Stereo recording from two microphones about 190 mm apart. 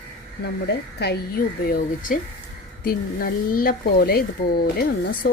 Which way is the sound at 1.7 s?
45° left (ahead or behind).